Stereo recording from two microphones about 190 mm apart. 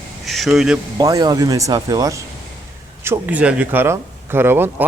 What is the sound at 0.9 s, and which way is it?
Speech, 20° right (ahead or behind).